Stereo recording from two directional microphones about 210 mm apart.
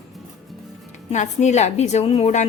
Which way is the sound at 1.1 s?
35° left (ahead or behind).